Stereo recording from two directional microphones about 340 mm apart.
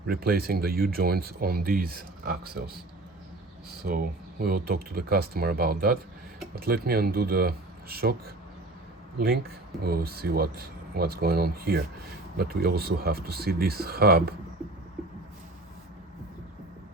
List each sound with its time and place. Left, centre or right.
0.1 s speech: right
3.8 s speech: right
9.1 s speech: right